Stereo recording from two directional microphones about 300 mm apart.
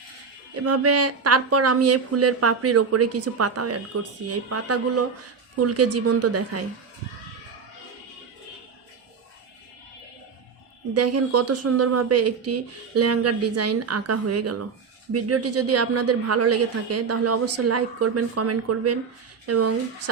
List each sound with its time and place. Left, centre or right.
0.5 s a woman's voice: right
10.9 s a woman's voice: right